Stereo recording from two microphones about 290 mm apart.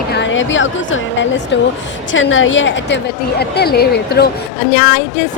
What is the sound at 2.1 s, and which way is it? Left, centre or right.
A woman's voice, left.